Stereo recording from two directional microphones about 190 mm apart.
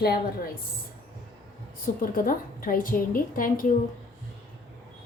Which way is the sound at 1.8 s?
45° left (ahead or behind).